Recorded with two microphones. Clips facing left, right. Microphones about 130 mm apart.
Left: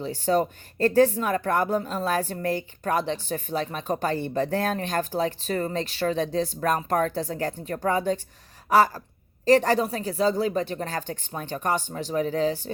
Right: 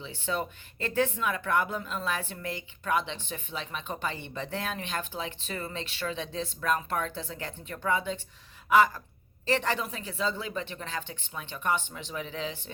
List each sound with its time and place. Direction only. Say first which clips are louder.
0.0 s speech: left 9 dB; 40° left (ahead or behind)